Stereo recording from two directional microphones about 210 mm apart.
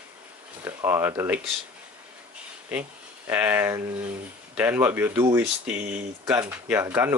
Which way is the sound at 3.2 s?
10° right (ahead or behind).